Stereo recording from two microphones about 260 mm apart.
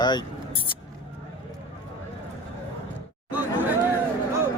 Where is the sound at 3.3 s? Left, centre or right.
Centre.